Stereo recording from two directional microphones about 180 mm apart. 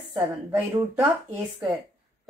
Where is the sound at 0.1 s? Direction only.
20° right (ahead or behind).